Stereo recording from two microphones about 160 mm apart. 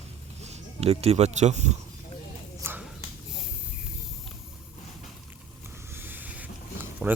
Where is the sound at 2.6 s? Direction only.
15° right (ahead or behind).